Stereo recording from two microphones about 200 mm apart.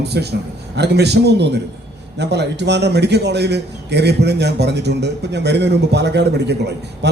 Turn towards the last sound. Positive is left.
turn(degrees=-55)  # may be behind; listen again after turning